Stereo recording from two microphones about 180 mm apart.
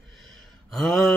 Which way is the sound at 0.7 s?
Centre (ahead or behind).